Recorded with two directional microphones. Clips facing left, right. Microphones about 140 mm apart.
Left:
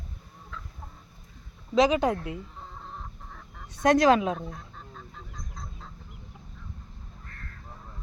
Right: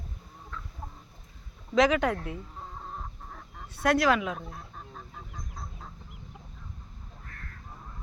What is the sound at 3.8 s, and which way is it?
Speech, 20° left (ahead or behind).